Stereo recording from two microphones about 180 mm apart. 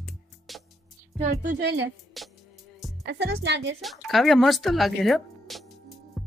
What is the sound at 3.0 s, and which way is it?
Speech, 70° right (ahead or behind).